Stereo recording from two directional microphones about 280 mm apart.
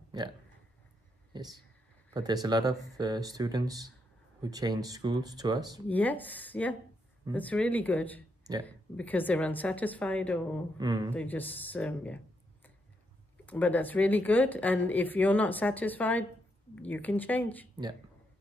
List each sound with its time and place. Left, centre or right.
0.1 s speech: centre
1.3 s speech: centre
5.9 s speech: centre
10.8 s speech: centre
11.1 s speech: centre
13.5 s speech: centre